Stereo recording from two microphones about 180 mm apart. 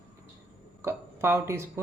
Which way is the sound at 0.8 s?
15° right (ahead or behind).